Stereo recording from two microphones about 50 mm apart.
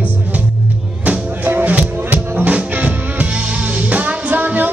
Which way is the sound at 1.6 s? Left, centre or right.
Right.